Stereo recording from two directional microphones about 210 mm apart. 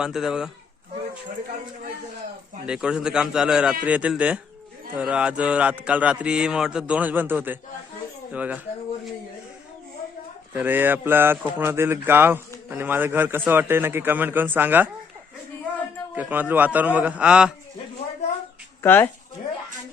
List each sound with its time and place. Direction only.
0.0 s a man's voice: centre (ahead or behind)
2.6 s a man's voice: 5° right (ahead or behind)
10.5 s speech: 10° right (ahead or behind)
16.1 s speech: 10° right (ahead or behind)
18.8 s speech: 10° left (ahead or behind)